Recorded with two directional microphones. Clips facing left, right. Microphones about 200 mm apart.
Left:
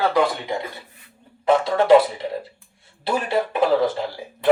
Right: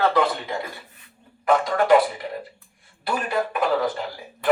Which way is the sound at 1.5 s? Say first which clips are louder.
Left 3 dB; 25° left (ahead or behind).